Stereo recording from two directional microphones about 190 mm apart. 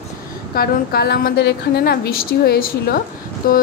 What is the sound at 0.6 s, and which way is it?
A woman's voice, 55° left (ahead or behind).